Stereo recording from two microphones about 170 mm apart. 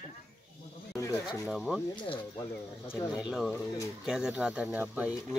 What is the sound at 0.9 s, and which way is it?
Speech, 20° left (ahead or behind).